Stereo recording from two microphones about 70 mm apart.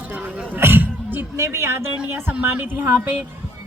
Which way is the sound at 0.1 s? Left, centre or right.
Right.